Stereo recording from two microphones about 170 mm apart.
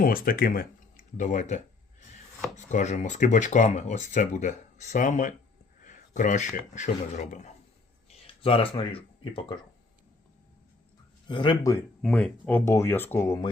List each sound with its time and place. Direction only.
0.0 s speech: 60° left (ahead or behind)
1.1 s speech: 45° left (ahead or behind)
2.6 s speech: 45° left (ahead or behind)
8.4 s speech: 30° left (ahead or behind)
11.3 s speech: 30° left (ahead or behind)
12.0 s speech: 5° left (ahead or behind)